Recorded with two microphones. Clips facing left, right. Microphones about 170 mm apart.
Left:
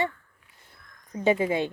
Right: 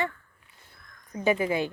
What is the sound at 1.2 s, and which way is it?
Speech, 25° left (ahead or behind).